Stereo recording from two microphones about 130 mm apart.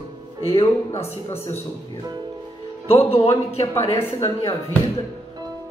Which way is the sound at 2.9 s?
50° left (ahead or behind).